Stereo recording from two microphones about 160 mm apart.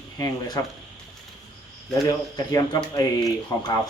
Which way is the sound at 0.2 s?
25° left (ahead or behind).